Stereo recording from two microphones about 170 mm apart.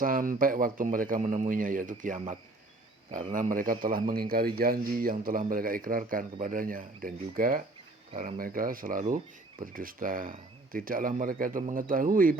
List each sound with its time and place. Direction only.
0.0 s a man's voice: 55° right (ahead or behind)
3.3 s a man's voice: 55° right (ahead or behind)